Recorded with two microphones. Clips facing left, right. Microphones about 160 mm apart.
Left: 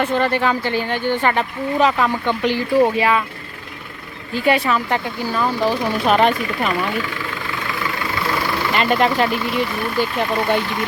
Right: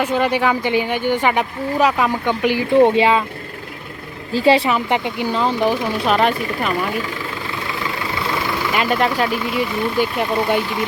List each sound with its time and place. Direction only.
0.0 s speech: 10° right (ahead or behind)
2.7 s speech: 25° right (ahead or behind)
4.4 s speech: 30° right (ahead or behind)
6.2 s speech: centre (ahead or behind)
8.3 s speech: 5° right (ahead or behind)